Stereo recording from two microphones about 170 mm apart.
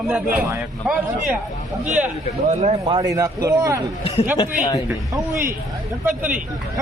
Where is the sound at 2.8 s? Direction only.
25° right (ahead or behind).